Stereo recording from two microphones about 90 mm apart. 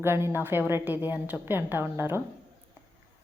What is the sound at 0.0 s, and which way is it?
A woman's voice, 30° right (ahead or behind).